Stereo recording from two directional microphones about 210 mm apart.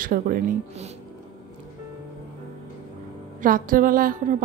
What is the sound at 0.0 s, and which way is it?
Speech, 40° right (ahead or behind).